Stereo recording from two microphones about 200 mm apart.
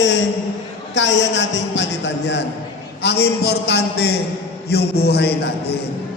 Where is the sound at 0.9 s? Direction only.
65° left (ahead or behind).